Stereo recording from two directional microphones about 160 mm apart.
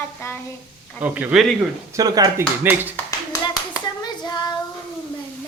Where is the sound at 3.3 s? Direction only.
25° left (ahead or behind).